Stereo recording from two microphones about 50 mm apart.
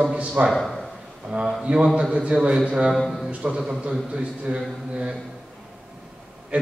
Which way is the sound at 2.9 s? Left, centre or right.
Centre.